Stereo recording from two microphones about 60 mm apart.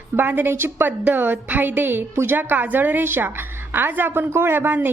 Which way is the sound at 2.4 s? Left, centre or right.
Right.